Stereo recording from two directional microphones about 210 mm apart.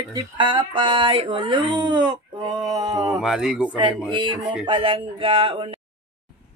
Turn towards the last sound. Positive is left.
turn(degrees=-25)  # may be behind; listen again after turning